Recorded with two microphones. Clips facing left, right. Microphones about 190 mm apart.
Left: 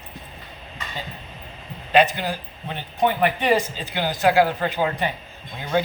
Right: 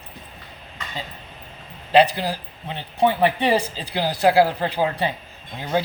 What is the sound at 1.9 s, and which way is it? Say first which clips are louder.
Speech: right 2 dB; 30° right (ahead or behind).